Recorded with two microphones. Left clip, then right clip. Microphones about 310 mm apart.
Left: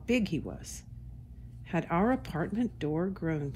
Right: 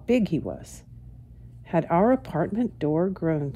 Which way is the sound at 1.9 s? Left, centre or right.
Right.